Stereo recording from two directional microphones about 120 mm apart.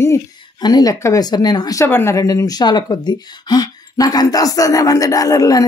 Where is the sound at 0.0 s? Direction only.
25° left (ahead or behind).